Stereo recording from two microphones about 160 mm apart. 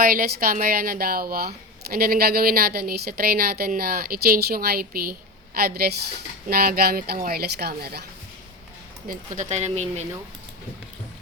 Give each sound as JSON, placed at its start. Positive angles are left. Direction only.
{"t": 0.0, "sound": "a woman's voice", "side_deg": -65}
{"t": 9.0, "sound": "speech", "side_deg": -55}